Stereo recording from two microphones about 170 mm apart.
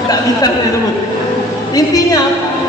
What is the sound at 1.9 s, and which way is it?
Speech, 20° left (ahead or behind).